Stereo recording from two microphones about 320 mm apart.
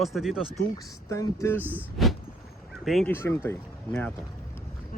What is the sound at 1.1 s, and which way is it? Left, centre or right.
Speech, centre.